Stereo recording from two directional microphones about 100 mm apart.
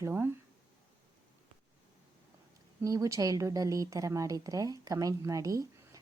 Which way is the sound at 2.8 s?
35° right (ahead or behind).